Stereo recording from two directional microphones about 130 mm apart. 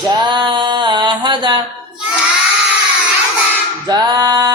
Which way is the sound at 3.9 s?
30° right (ahead or behind).